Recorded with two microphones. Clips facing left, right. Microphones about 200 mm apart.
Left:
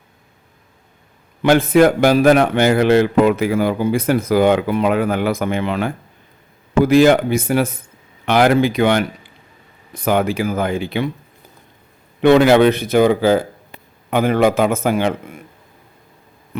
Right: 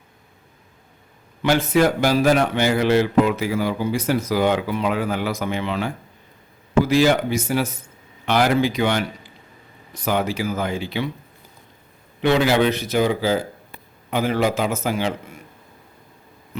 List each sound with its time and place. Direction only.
1.4 s a man's voice: 55° left (ahead or behind)
12.2 s a man's voice: 55° left (ahead or behind)